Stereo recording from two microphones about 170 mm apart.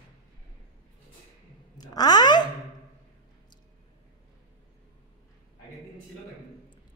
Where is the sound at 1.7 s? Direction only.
25° left (ahead or behind).